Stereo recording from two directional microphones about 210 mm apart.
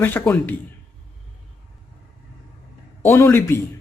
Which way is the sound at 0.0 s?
10° left (ahead or behind).